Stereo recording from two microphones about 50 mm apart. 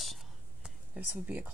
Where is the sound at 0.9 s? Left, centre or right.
Right.